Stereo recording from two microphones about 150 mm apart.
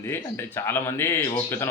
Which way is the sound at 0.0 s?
15° left (ahead or behind).